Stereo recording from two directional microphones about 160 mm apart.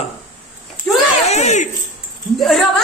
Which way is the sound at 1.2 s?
45° left (ahead or behind).